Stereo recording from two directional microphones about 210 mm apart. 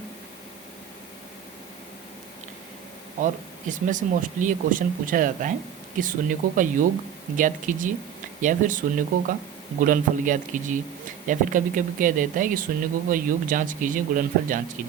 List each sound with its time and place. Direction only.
3.7 s speech: 40° right (ahead or behind)